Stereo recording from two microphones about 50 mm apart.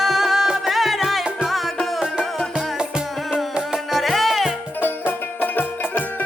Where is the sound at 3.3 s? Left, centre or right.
Centre.